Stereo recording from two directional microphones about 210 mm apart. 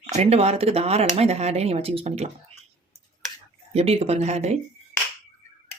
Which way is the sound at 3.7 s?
30° right (ahead or behind).